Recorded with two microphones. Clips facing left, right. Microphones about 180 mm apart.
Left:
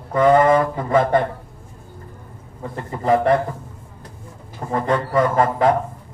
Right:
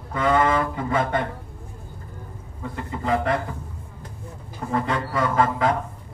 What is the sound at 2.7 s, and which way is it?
Speech, 45° left (ahead or behind).